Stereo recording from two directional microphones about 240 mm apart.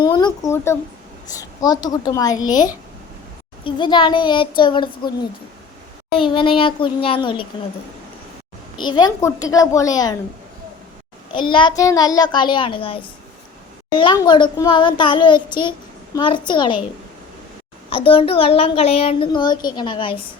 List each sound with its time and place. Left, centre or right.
0.0 s a woman's voice: centre
6.1 s a child's voice: left
8.8 s a woman's voice: centre
11.3 s a child's voice: centre
17.8 s a child's voice: left